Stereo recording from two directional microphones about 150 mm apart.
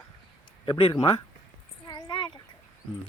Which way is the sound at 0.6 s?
35° left (ahead or behind).